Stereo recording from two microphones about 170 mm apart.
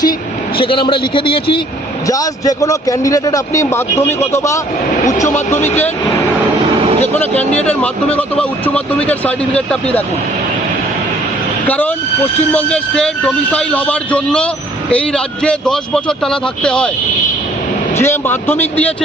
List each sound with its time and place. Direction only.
0.5 s a man's voice: 30° left (ahead or behind)
7.2 s a man's voice: 10° left (ahead or behind)
12.5 s a man's voice: 5° left (ahead or behind)
17.9 s a man's voice: 15° left (ahead or behind)